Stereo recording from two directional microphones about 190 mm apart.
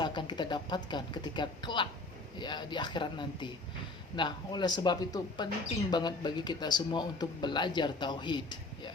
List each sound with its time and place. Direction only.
0.0 s a man's voice: 25° left (ahead or behind)